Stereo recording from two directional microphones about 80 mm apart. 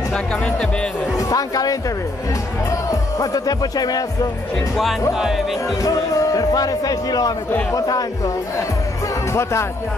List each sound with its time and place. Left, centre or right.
1.1 s speech: left
2.9 s speech: left
5.1 s speech: centre
5.8 s speech: left
9.3 s speech: left